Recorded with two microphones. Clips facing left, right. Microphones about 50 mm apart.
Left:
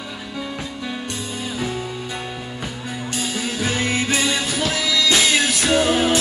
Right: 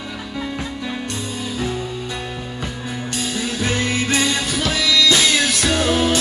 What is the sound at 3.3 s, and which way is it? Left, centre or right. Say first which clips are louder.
Music: right 2 dB; left.